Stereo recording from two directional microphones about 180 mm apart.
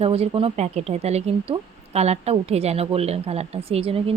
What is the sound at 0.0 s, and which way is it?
Speech, 35° right (ahead or behind).